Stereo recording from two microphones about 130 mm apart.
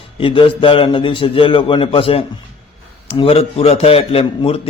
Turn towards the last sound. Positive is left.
turn(degrees=50)  # may be behind; listen again after turning